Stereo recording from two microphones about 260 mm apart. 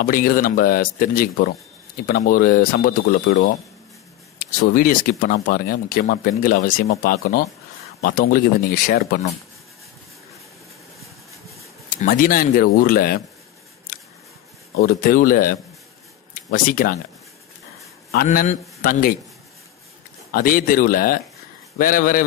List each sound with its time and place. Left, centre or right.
0.0 s speech: left
12.0 s speech: left
14.8 s speech: left
18.1 s a man's voice: left
20.2 s speech: left